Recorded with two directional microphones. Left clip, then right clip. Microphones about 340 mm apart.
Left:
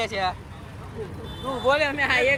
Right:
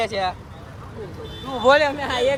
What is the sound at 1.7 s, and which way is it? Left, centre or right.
Speech, right.